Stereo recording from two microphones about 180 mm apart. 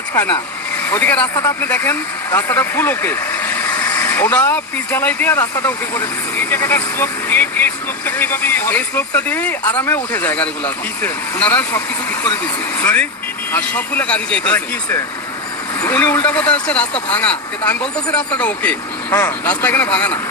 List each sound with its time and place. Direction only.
0.1 s speech: 10° left (ahead or behind)
12.8 s speech: 10° left (ahead or behind)